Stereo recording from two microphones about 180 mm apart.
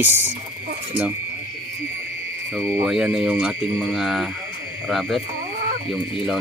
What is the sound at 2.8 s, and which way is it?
Speech, 5° right (ahead or behind).